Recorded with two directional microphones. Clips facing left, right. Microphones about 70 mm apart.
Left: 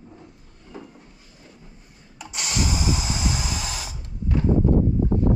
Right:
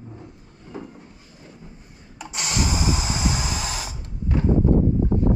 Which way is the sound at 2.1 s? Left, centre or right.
Right.